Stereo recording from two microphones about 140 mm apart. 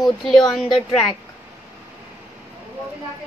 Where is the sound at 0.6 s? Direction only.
35° left (ahead or behind).